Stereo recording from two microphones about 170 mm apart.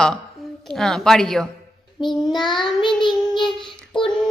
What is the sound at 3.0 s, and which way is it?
Child singing, 30° left (ahead or behind).